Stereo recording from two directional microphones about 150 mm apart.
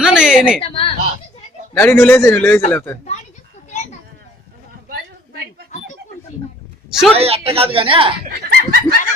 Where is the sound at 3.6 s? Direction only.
50° left (ahead or behind).